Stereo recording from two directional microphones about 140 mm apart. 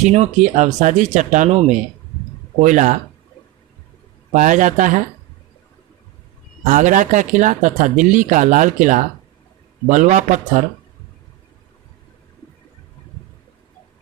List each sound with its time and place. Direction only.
0.0 s speech: 55° right (ahead or behind)
2.6 s speech: 60° right (ahead or behind)
4.3 s speech: 65° right (ahead or behind)
6.7 s speech: 65° right (ahead or behind)